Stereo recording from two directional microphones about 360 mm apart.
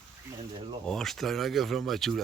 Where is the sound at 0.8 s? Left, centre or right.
Centre.